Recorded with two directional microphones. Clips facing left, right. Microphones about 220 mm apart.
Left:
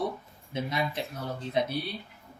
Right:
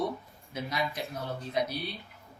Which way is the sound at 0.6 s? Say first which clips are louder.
Left 2 dB; 25° left (ahead or behind).